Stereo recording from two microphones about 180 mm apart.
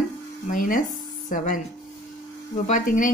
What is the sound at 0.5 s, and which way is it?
Speech, 50° left (ahead or behind).